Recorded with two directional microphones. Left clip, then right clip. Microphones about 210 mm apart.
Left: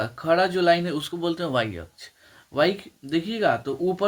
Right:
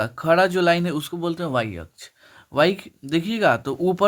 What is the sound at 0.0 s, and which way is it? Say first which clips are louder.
Speech: right 3 dB; 35° right (ahead or behind).